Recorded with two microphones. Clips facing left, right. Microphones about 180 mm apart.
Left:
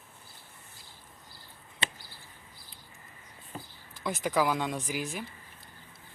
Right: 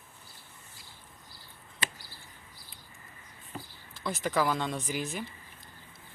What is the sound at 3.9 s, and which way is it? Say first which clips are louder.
Speech: left 1 dB; 15° left (ahead or behind).